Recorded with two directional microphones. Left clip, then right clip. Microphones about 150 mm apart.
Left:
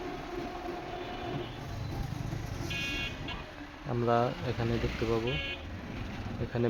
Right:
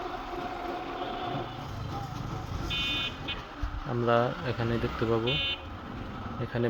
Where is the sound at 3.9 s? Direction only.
5° right (ahead or behind).